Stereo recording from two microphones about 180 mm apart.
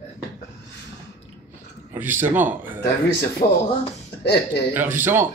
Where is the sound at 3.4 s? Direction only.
45° left (ahead or behind).